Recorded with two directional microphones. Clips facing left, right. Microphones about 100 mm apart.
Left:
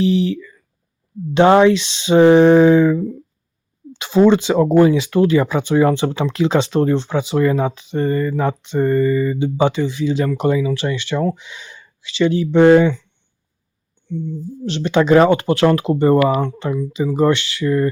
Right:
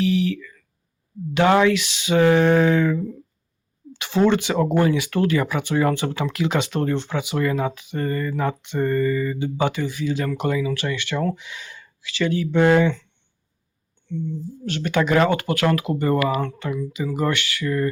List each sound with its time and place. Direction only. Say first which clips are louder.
0.0 s speech: left 4 dB; 30° left (ahead or behind)
14.6 s speech: left 6 dB; 20° left (ahead or behind)